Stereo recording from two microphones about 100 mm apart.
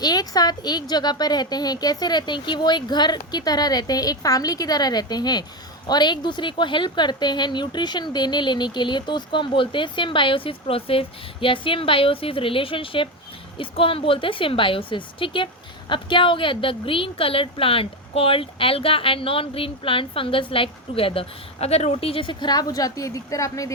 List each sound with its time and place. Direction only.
0.0 s a woman's voice: 40° left (ahead or behind)